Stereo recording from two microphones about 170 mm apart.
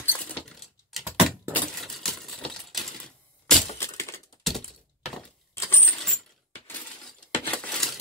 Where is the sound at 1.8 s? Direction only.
Centre (ahead or behind).